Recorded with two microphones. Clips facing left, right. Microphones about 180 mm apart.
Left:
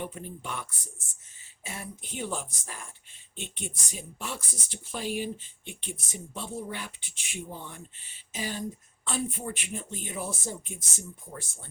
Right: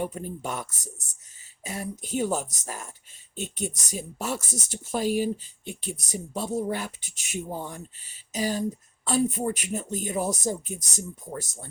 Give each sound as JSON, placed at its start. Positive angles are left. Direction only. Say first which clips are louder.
{"t": 0.0, "sound": "speech", "louder": "right 6 dB", "side_deg": -40}